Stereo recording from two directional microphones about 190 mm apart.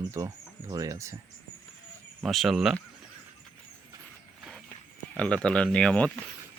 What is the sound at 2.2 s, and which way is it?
Speech, centre (ahead or behind).